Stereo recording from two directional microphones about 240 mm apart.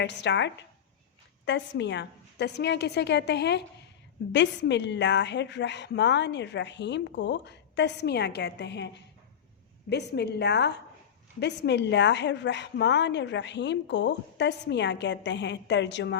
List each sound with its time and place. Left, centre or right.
0.0 s a woman's voice: left
9.9 s a woman's voice: left